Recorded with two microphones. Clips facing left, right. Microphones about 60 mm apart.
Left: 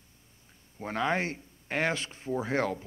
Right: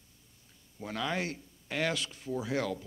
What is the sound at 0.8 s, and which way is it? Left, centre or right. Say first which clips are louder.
Speech: left 5 dB; left.